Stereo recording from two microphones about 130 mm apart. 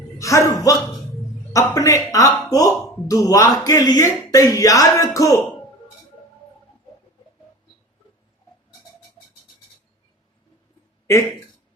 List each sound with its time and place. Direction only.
0.2 s speech: 25° left (ahead or behind)